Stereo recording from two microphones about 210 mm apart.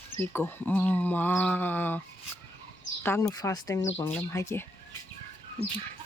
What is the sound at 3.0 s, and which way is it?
Speech, 10° left (ahead or behind).